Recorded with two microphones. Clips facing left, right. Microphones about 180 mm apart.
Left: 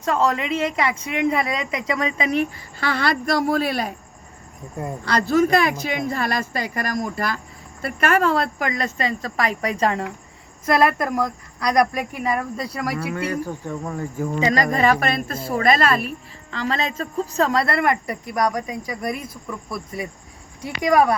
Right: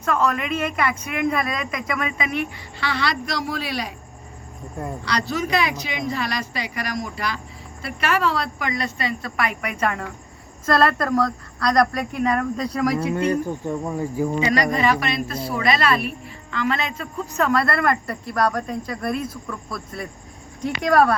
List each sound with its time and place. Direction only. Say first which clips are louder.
0.0 s speech: left 1 dB; 25° left (ahead or behind); by 3.9 s 50° left (ahead or behind)
5.0 s speech: left 8 dB; 50° left (ahead or behind); by 10.1 s 30° left (ahead or behind)
10.7 s speech: even; 15° left (ahead or behind)
13.4 s speech: right 3 dB; 15° right (ahead or behind)
14.4 s speech: left 3 dB; 40° left (ahead or behind); by 21.2 s 15° left (ahead or behind)